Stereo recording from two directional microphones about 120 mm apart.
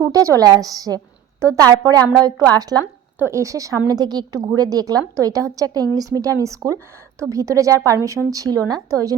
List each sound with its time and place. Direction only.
0.1 s a woman's voice: 30° right (ahead or behind)
3.2 s a woman's voice: 20° right (ahead or behind)